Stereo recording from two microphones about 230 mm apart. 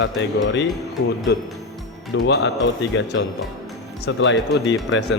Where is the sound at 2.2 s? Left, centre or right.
Left.